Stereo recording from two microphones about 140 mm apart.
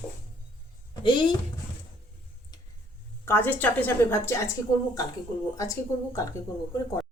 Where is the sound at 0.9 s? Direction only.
35° left (ahead or behind).